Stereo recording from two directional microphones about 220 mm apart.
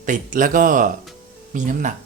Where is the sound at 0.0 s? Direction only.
35° right (ahead or behind).